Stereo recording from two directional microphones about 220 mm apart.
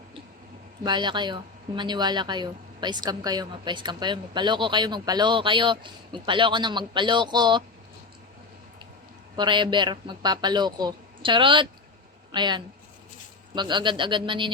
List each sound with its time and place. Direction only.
0.9 s speech: 20° right (ahead or behind)
9.3 s speech: 20° right (ahead or behind)